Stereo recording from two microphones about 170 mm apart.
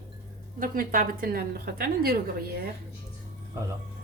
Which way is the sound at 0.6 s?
55° right (ahead or behind).